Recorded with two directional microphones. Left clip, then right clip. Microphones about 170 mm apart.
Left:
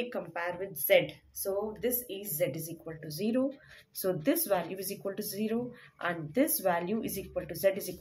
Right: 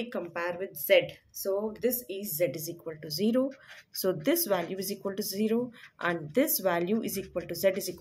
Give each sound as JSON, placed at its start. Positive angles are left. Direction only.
{"t": 0.0, "sound": "speech", "side_deg": -20}